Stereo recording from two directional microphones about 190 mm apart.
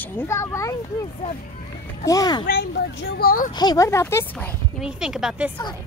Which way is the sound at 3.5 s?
20° left (ahead or behind).